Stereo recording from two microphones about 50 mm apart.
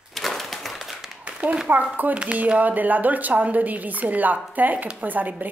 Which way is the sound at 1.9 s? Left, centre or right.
Right.